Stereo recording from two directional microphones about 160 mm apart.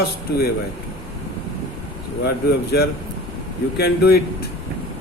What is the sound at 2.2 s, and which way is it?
Speech, 85° left.